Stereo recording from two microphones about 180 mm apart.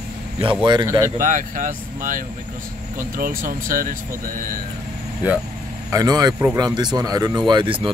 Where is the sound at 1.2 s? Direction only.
45° right (ahead or behind).